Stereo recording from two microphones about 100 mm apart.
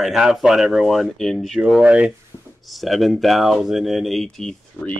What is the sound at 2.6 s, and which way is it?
Speech, centre (ahead or behind).